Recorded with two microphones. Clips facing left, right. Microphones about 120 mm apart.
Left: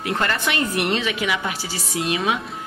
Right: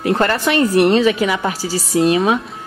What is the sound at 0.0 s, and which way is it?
A woman's voice, 40° right (ahead or behind).